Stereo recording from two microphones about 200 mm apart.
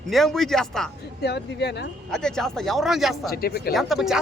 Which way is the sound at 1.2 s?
55° left (ahead or behind).